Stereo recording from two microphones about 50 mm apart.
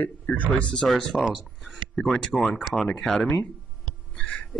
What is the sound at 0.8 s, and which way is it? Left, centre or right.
Speech, centre.